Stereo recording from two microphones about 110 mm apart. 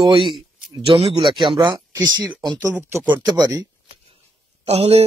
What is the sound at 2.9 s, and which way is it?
Speech, 20° right (ahead or behind).